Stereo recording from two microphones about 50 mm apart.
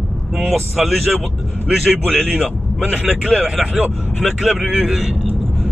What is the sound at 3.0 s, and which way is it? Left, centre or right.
Speech, right.